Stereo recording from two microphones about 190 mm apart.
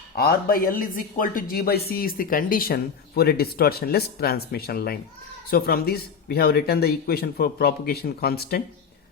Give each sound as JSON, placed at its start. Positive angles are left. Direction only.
{"t": 0.2, "sound": "speech", "side_deg": 50}